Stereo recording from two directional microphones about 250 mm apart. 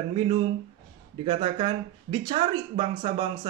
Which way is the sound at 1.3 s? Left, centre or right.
Right.